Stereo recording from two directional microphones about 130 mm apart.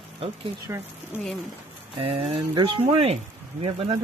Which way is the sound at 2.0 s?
45° right (ahead or behind).